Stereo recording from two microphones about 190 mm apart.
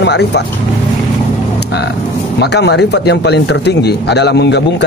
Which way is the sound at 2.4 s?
60° left (ahead or behind).